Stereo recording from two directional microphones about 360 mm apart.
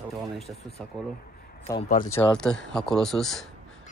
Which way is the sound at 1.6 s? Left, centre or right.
Centre.